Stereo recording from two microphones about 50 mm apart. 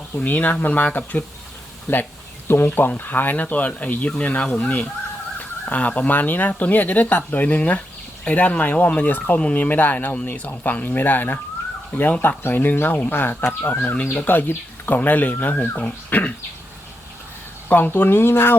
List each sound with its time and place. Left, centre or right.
0.2 s speech: left
1.9 s speech: left
2.6 s speech: left
17.7 s speech: left